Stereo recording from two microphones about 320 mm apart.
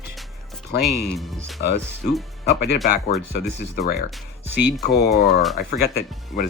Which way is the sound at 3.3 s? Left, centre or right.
Left.